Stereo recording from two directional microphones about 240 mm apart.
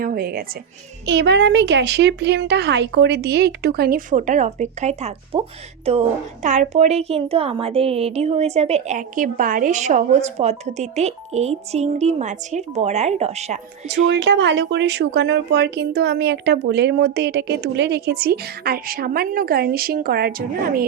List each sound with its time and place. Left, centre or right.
0.0 s a woman's voice: right
14.1 s speech: right